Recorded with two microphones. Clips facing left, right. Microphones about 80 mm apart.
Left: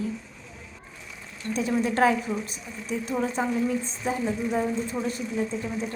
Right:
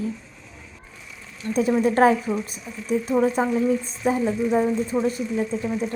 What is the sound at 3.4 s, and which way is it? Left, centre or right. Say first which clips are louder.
Speech: right 5 dB; right.